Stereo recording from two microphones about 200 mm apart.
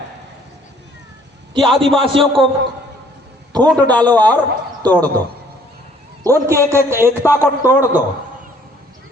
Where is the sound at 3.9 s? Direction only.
20° right (ahead or behind).